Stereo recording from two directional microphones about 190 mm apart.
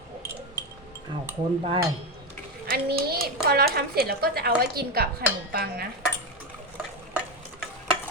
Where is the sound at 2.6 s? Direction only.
55° right (ahead or behind).